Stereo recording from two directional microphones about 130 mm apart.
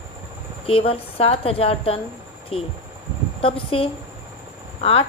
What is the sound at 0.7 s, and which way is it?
Speech, 45° left (ahead or behind).